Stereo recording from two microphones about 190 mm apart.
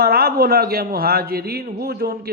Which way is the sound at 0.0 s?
55° right (ahead or behind).